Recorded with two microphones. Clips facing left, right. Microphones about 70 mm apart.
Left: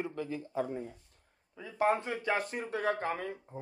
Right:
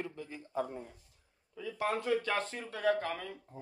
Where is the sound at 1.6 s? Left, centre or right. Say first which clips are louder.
Left 5 dB; left.